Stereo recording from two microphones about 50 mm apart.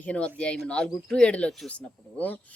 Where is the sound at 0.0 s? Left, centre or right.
Left.